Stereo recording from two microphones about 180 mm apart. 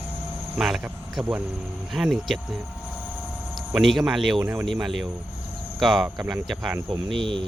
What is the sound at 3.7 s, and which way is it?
Cricket, centre (ahead or behind).